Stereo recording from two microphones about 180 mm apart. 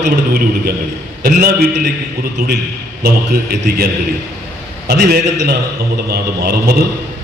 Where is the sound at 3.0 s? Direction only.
60° right (ahead or behind).